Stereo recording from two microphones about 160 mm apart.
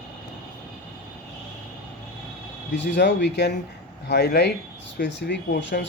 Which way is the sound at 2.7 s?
90° left.